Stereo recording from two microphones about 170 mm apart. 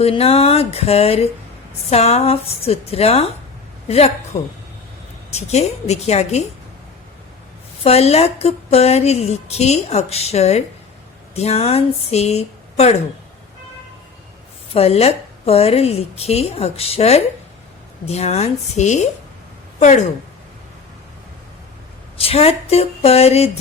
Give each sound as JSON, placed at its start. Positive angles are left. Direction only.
{"t": 0.0, "sound": "a woman's voice", "side_deg": 35}
{"t": 7.9, "sound": "a woman's voice", "side_deg": 40}
{"t": 14.7, "sound": "a woman's voice", "side_deg": 35}
{"t": 22.2, "sound": "a woman's voice", "side_deg": 35}